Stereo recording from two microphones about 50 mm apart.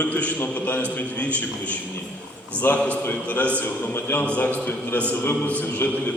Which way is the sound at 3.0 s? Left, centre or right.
Left.